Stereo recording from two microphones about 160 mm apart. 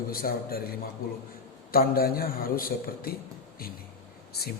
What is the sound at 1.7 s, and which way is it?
Speech, 65° left (ahead or behind).